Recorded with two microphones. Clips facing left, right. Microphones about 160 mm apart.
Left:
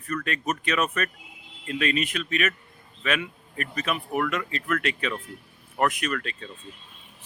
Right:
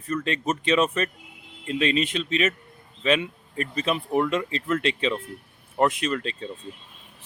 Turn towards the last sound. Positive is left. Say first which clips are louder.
# right 3 dB
turn(degrees=-25)  # may be behind; listen again after turning